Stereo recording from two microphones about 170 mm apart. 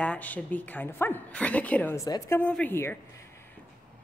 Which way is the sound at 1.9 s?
20° left (ahead or behind).